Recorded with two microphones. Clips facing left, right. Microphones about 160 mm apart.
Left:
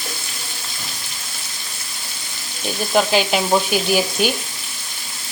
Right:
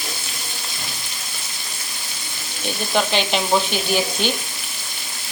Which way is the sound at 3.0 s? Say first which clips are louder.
Left 3 dB; 5° left (ahead or behind).